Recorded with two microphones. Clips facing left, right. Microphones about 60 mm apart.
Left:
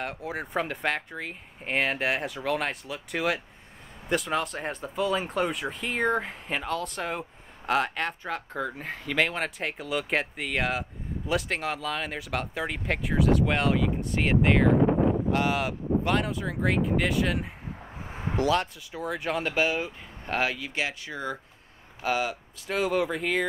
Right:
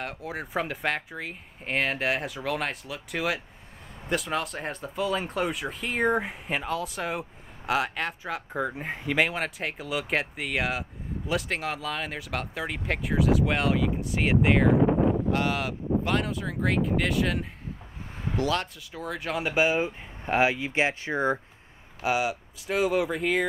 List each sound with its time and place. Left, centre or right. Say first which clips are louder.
0.0 s speech: left 1 dB; centre
8.5 s speech: right 2 dB; centre
19.4 s speech: right 5 dB; centre; by 21.4 s right
22.0 s speech: right 1 dB; centre